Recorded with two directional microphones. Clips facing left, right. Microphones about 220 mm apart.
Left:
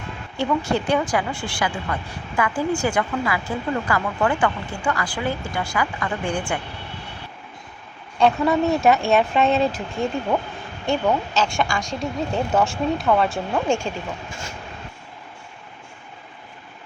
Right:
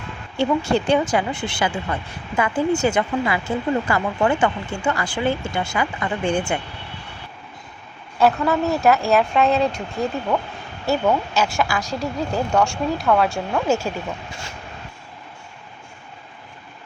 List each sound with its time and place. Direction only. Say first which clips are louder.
0.3 s a woman's voice: right 3 dB; 25° right (ahead or behind)
8.2 s speech: even; centre (ahead or behind)